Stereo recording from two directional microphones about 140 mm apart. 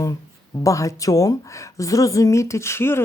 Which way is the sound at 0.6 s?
25° left (ahead or behind).